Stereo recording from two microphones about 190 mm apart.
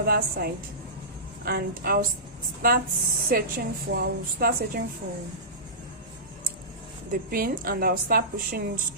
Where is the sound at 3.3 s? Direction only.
50° right (ahead or behind).